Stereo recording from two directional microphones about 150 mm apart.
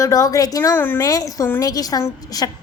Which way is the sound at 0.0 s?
25° left (ahead or behind).